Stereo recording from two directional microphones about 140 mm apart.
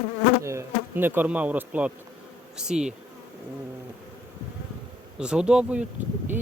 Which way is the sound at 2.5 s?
5° right (ahead or behind).